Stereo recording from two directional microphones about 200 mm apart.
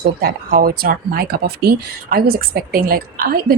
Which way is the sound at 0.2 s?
50° right (ahead or behind).